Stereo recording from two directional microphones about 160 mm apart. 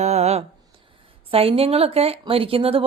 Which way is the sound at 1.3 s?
35° right (ahead or behind).